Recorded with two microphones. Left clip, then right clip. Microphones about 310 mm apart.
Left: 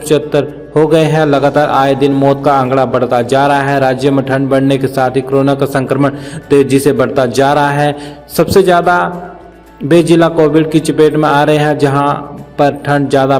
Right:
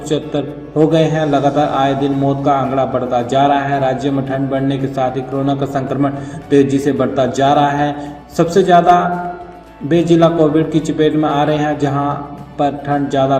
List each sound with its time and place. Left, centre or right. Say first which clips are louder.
0.9 s a man's voice: left 5 dB; left